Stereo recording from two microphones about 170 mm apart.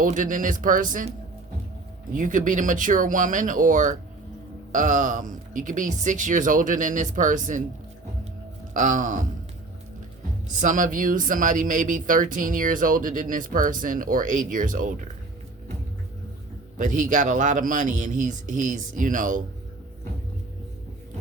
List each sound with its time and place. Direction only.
0.0 s speech: 50° right (ahead or behind)
2.1 s speech: 50° right (ahead or behind)
8.7 s speech: 50° right (ahead or behind)
10.6 s speech: 50° right (ahead or behind)
16.7 s speech: 50° right (ahead or behind)